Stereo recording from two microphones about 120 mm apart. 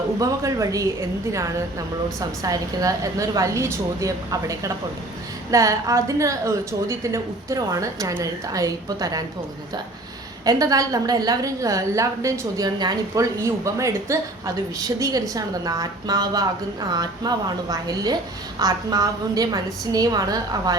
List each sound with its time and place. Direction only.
0.2 s a woman's voice: 30° right (ahead or behind)
2.4 s a woman's voice: 30° right (ahead or behind)
10.4 s a woman's voice: 30° right (ahead or behind)